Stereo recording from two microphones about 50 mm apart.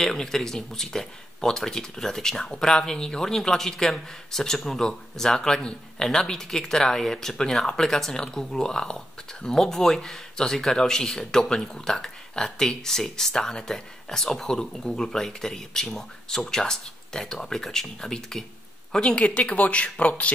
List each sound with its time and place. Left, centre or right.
0.0 s speech: centre; by 20.3 s left